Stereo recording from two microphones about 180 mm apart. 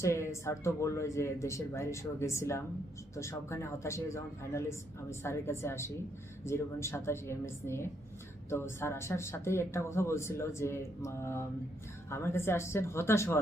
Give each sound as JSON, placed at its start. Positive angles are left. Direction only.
{"t": 0.0, "sound": "speech", "side_deg": 15}